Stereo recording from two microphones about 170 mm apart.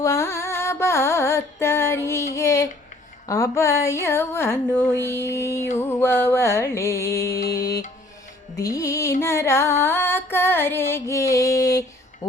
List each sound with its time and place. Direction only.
0.0 s carnatic music: 15° left (ahead or behind)
3.2 s a sound: 20° left (ahead or behind)
8.5 s music: 20° left (ahead or behind)